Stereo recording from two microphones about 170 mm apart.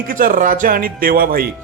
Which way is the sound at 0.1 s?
55° right (ahead or behind).